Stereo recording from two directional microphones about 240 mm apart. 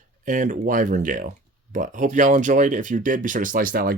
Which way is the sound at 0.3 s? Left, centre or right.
Right.